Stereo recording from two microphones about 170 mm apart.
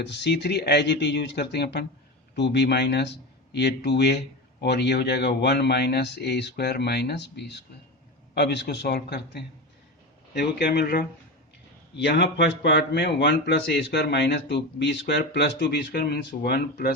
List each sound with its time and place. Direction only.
0.0 s a man's voice: 90° left; by 11.0 s 70° left (ahead or behind)
11.9 s a man's voice: 85° left; by 16.9 s 65° left (ahead or behind)